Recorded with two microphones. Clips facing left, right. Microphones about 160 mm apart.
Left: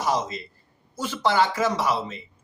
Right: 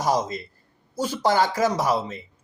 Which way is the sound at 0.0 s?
40° right (ahead or behind).